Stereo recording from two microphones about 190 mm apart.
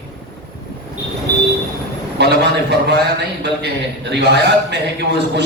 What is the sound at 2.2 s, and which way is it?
A man's voice, 60° right (ahead or behind).